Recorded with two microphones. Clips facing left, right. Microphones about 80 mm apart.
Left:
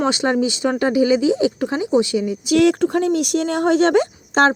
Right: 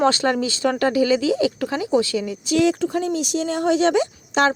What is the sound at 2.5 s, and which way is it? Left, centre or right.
Speech, left.